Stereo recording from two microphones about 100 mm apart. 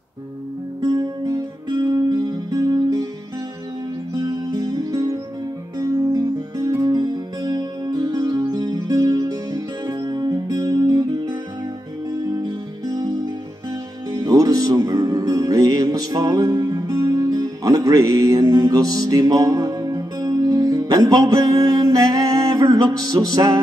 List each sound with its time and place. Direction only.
0.8 s music: 30° right (ahead or behind)
1.7 s music: 45° right (ahead or behind)
4.2 s music: 40° right (ahead or behind)
6.0 s music: 25° right (ahead or behind)
6.8 s music: 45° right (ahead or behind)
12.4 s music: 40° right (ahead or behind)